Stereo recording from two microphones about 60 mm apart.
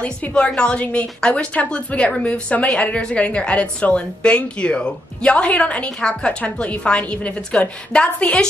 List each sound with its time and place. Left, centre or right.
0.0 s a woman's voice: centre